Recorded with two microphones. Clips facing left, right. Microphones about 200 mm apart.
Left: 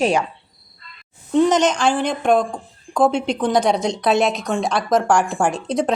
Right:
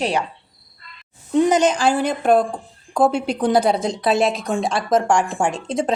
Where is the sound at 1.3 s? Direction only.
10° right (ahead or behind).